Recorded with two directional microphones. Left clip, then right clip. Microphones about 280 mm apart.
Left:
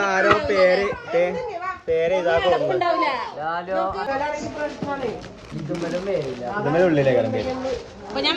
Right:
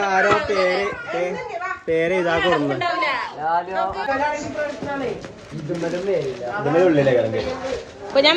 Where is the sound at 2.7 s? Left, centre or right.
Left.